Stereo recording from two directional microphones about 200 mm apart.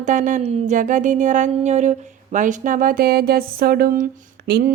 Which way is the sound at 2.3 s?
40° right (ahead or behind).